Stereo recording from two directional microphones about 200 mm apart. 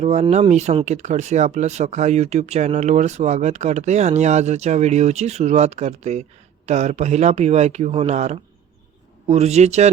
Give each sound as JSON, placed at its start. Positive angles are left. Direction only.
{"t": 0.0, "sound": "speech", "side_deg": -35}